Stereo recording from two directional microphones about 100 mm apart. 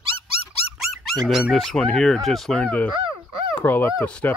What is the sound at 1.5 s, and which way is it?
Speech, 5° left (ahead or behind).